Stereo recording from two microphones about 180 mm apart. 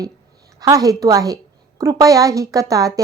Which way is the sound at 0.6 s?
20° right (ahead or behind).